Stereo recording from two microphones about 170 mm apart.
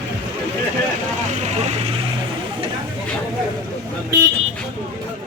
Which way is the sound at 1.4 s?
40° right (ahead or behind).